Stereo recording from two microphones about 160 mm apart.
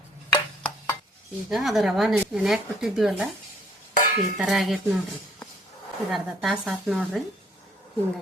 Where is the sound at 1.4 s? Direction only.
Centre (ahead or behind).